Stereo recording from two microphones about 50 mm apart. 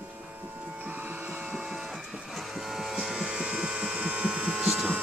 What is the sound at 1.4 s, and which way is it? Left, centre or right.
Printer, centre.